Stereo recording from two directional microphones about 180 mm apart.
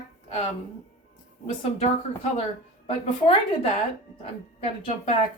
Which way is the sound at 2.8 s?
30° left (ahead or behind).